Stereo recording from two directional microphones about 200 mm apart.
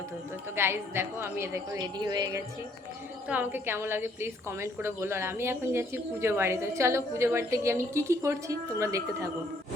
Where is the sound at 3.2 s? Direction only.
10° right (ahead or behind).